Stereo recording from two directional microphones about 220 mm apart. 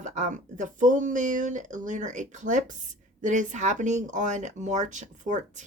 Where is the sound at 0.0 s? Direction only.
35° right (ahead or behind).